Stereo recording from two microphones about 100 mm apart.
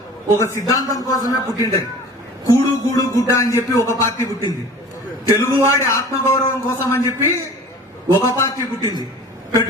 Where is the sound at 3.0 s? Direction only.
35° left (ahead or behind).